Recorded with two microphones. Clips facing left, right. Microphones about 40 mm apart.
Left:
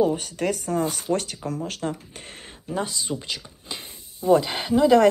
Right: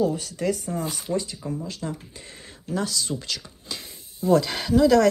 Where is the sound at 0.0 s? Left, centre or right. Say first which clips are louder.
Left 2 dB; left.